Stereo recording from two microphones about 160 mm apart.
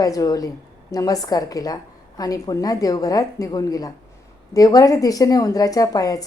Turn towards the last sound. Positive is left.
turn(degrees=20)  # may be behind; listen again after turning